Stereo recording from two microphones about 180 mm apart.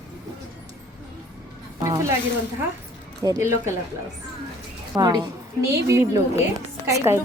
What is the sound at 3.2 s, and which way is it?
Speech, 20° right (ahead or behind).